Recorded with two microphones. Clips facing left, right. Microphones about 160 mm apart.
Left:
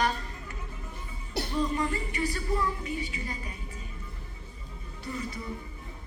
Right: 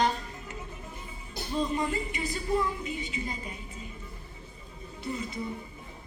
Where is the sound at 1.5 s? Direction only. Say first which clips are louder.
Right 1 dB; 20° right (ahead or behind).